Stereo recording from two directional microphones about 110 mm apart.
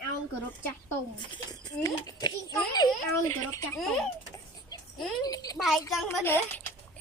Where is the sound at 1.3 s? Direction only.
35° left (ahead or behind).